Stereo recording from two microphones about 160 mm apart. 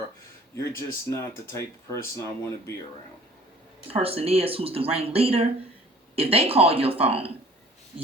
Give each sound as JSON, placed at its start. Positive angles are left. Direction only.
{"t": 0.5, "sound": "speech", "side_deg": 15}
{"t": 3.8, "sound": "speech", "side_deg": -35}